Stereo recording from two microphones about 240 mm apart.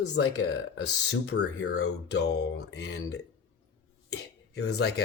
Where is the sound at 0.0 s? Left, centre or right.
Left.